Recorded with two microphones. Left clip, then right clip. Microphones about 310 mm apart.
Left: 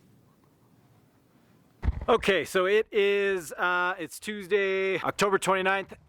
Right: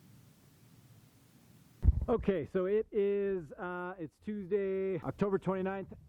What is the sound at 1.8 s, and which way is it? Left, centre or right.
Speech, centre.